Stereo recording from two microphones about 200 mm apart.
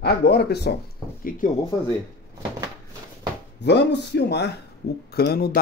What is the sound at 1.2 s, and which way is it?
Speech, 40° left (ahead or behind).